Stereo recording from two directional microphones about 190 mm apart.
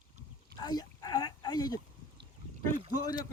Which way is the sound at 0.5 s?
20° left (ahead or behind).